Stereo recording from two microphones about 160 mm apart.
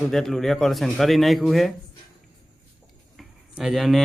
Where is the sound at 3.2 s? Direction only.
Centre (ahead or behind).